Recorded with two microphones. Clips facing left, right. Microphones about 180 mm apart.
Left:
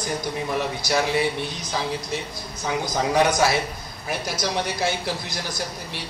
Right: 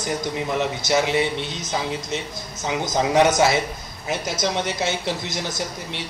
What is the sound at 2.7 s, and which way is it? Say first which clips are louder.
Speech: right 2 dB; 20° right (ahead or behind).